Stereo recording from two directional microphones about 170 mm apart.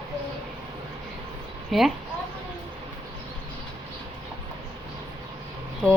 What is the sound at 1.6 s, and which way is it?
Speech, centre (ahead or behind).